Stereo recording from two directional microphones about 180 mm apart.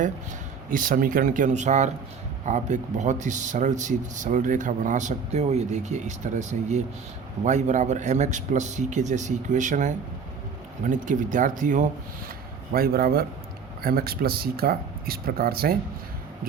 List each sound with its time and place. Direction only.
0.7 s speech: 50° right (ahead or behind)